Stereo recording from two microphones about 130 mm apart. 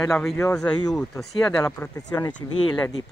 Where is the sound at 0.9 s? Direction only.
5° left (ahead or behind).